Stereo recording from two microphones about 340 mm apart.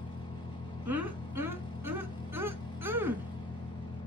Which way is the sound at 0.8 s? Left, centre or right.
Centre.